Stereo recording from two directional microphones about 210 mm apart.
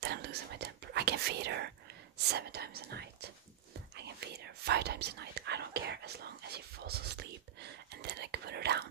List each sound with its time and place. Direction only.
0.0 s whispering: 50° right (ahead or behind)
4.6 s whispering: 50° right (ahead or behind)